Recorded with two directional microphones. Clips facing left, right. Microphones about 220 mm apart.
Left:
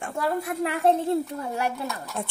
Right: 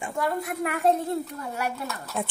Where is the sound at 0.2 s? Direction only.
30° left (ahead or behind).